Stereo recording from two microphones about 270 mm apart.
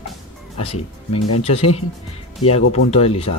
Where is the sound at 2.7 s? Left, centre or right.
Left.